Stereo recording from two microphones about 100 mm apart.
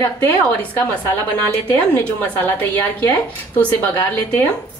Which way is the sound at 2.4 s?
20° left (ahead or behind).